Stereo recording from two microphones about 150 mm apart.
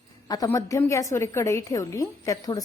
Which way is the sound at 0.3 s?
25° left (ahead or behind).